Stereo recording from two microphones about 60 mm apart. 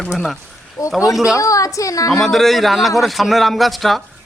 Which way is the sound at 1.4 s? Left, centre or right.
Left.